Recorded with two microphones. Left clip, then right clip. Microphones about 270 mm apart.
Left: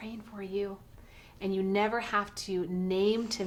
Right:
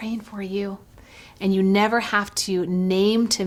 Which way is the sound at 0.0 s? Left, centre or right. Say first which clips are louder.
Right 10 dB; right.